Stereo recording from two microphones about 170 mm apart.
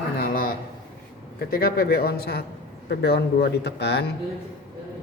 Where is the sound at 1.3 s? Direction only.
60° left (ahead or behind); by 4.1 s 75° left (ahead or behind).